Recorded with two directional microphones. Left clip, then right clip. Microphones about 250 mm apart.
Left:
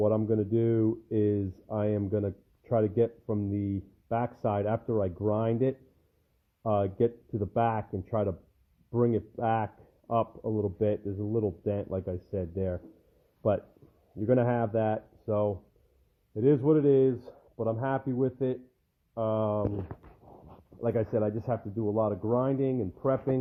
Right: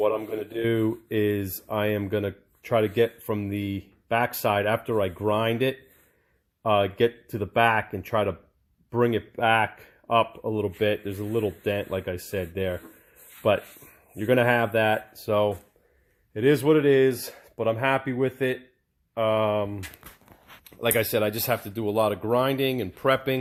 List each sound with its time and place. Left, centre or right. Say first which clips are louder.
0.0 s speech: right 2 dB; centre
20.8 s speech: right 5 dB; centre